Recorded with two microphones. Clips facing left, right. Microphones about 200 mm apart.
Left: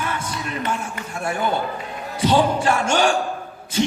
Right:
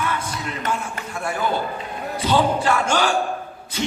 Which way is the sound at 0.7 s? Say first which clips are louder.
Even; 25° left (ahead or behind).